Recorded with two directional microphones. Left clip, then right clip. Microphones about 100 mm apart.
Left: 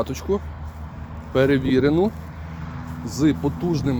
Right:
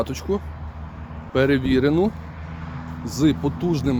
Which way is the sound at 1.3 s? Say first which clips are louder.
Left 1 dB; 5° right (ahead or behind).